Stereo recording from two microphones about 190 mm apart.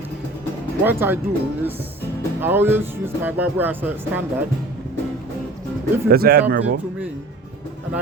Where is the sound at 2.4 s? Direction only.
10° right (ahead or behind).